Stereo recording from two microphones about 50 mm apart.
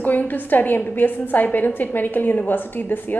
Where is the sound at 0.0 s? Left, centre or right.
Left.